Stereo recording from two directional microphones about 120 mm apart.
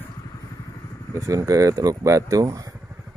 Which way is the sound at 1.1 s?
30° right (ahead or behind).